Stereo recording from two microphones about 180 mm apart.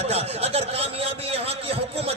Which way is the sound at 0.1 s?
35° right (ahead or behind).